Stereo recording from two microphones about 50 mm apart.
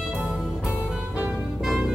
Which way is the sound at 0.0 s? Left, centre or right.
Centre.